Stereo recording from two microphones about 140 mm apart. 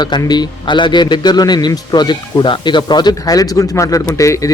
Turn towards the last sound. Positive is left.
turn(degrees=25)  # may be behind; listen again after turning